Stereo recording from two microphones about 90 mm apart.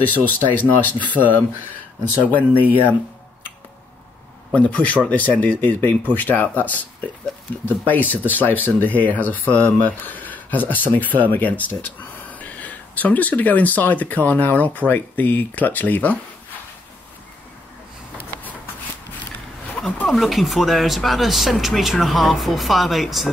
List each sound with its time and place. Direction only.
0.0 s speech: 20° left (ahead or behind)
2.0 s speech: 20° left (ahead or behind)
4.6 s speech: 15° left (ahead or behind)
20.1 s speech: centre (ahead or behind)